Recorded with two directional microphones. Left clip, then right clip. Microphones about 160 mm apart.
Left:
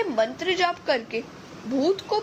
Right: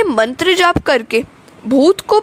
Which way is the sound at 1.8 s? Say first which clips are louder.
Right 13 dB; 90° right.